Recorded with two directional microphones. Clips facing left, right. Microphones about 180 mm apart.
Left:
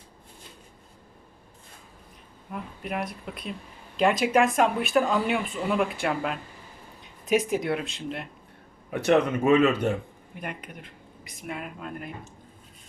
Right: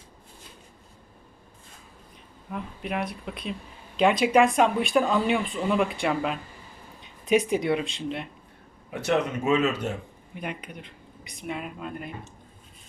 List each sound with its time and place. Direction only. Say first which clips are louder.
2.5 s speech: right 1 dB; centre (ahead or behind)
9.0 s speech: left 4 dB; 55° left (ahead or behind)
11.3 s speech: right 2 dB; 5° left (ahead or behind)